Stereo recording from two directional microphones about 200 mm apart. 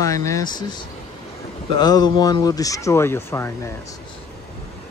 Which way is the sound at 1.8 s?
20° left (ahead or behind).